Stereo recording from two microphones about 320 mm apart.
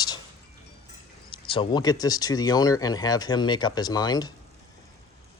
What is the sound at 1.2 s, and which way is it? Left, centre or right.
Speech, centre.